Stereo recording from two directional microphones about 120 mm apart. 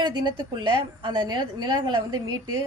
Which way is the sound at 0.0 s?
35° right (ahead or behind).